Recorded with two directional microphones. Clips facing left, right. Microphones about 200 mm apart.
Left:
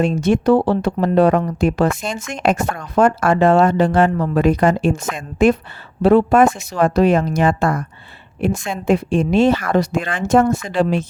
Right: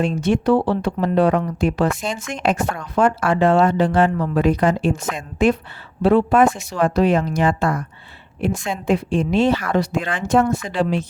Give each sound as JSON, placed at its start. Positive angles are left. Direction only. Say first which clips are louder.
{"t": 0.0, "sound": "speech", "louder": "left 3 dB", "side_deg": 45}